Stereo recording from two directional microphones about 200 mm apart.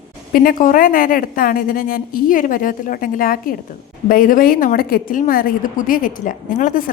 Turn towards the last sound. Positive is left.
turn(degrees=40)  # may be behind; listen again after turning